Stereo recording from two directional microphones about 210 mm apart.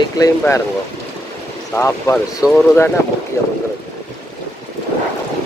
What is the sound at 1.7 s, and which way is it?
Speech, 15° left (ahead or behind).